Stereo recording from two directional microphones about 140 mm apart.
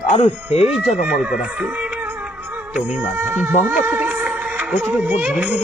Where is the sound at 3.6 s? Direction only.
10° right (ahead or behind).